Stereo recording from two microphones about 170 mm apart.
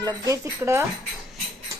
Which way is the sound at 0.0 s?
15° right (ahead or behind).